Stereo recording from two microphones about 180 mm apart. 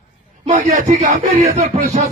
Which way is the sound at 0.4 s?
40° right (ahead or behind).